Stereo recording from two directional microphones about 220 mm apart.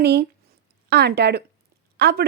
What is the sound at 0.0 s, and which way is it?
Speech, 45° right (ahead or behind).